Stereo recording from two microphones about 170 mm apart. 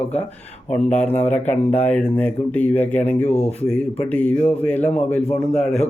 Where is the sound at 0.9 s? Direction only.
10° left (ahead or behind).